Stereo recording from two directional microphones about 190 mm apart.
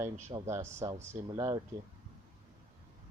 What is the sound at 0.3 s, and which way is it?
Speech, 15° right (ahead or behind).